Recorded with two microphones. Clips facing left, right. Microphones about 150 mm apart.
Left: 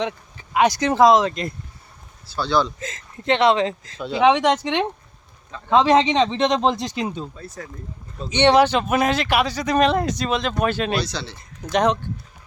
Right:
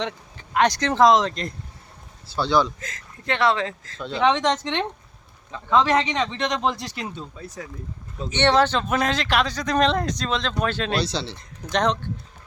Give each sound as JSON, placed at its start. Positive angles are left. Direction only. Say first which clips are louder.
{"t": 0.0, "sound": "speech", "louder": "left 3 dB", "side_deg": 5}
{"t": 2.2, "sound": "speech", "louder": "even", "side_deg": -20}
{"t": 2.8, "sound": "speech", "louder": "left 6 dB", "side_deg": 20}
{"t": 7.3, "sound": "speech", "louder": "even", "side_deg": -15}
{"t": 8.3, "sound": "speech", "louder": "left 4 dB", "side_deg": 15}
{"t": 11.0, "sound": "speech", "louder": "right 2 dB", "side_deg": -30}
{"t": 11.7, "sound": "speech", "louder": "left 3 dB", "side_deg": 5}